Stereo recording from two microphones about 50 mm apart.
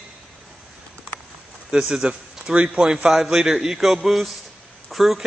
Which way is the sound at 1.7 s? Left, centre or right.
Centre.